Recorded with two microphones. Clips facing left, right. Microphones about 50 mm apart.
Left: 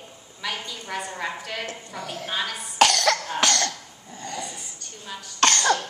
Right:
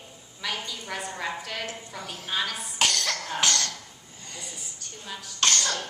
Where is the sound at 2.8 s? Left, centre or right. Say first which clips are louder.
Left 8 dB; left.